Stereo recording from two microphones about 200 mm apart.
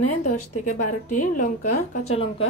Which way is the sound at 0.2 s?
40° left (ahead or behind).